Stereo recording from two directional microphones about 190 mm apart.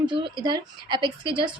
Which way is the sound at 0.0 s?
25° right (ahead or behind).